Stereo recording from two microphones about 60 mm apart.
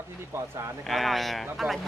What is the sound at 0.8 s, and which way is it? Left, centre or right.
Speech, centre.